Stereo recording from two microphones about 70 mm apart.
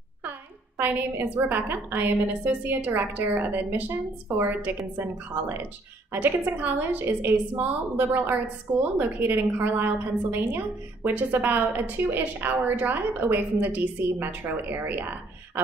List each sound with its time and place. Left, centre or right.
0.7 s a woman's voice: right